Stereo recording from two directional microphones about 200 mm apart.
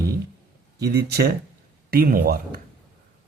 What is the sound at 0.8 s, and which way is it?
Speech, 55° right (ahead or behind).